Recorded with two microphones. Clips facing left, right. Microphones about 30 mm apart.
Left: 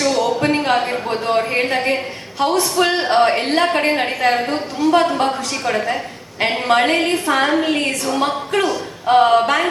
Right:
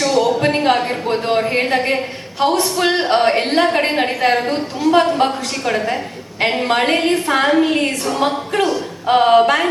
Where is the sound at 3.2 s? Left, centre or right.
Centre.